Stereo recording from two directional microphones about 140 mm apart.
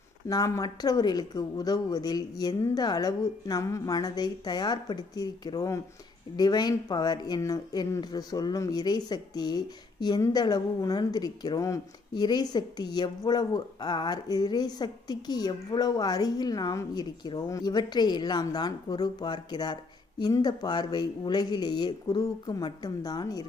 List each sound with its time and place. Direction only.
0.3 s speech: 25° left (ahead or behind)